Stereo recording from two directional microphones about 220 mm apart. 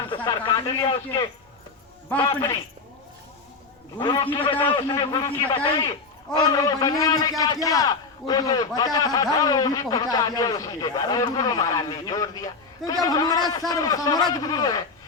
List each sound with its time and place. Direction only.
0.3 s speech: 20° left (ahead or behind)
2.0 s a man's voice: 10° left (ahead or behind)
3.9 s a man's voice: 20° left (ahead or behind)